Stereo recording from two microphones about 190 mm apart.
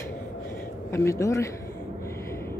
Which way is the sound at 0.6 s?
15° left (ahead or behind).